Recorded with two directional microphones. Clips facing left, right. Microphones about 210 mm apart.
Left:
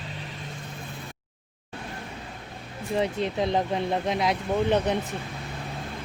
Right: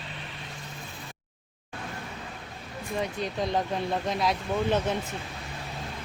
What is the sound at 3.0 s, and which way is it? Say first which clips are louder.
Speech: left 4 dB; 25° left (ahead or behind).